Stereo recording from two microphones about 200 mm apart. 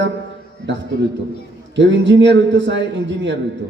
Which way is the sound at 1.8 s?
65° right (ahead or behind).